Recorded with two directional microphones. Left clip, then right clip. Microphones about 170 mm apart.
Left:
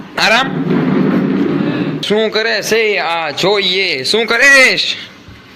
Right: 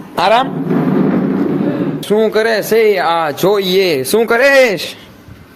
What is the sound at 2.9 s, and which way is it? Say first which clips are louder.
Speech: right 3 dB; 30° right (ahead or behind).